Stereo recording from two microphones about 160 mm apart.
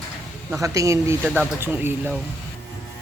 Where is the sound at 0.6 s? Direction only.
20° right (ahead or behind).